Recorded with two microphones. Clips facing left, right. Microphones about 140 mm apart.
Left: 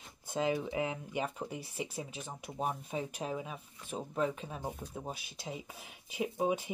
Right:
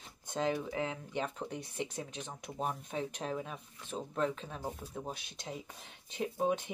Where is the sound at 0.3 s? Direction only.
5° left (ahead or behind).